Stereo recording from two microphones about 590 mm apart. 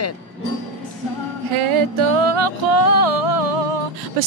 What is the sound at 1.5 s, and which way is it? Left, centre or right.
Music, right.